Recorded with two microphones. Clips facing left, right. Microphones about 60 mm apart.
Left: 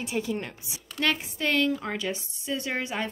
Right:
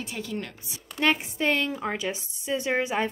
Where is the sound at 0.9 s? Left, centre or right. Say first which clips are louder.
Right 3 dB; centre.